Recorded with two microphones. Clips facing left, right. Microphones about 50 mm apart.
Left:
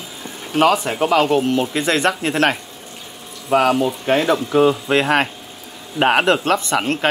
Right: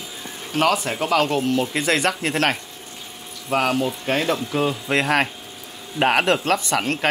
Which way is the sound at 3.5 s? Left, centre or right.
Centre.